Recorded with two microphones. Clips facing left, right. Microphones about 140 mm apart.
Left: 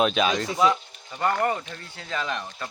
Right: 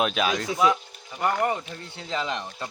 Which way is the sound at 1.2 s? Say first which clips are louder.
Even; 15° right (ahead or behind).